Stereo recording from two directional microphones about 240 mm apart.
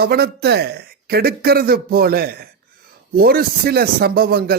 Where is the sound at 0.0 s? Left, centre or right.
Right.